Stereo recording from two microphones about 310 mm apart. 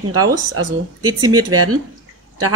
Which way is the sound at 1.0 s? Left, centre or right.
Centre.